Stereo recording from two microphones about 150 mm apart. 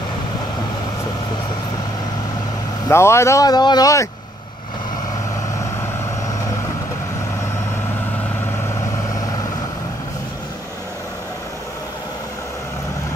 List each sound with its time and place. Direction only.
2.9 s speech: 20° left (ahead or behind)